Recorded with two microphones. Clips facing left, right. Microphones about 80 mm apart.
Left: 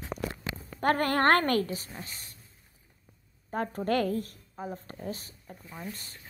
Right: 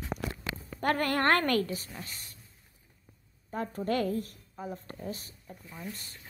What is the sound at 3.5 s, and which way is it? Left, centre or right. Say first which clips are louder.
Speech: left 2 dB; left.